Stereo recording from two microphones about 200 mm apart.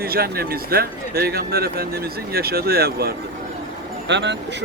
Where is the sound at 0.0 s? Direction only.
50° right (ahead or behind).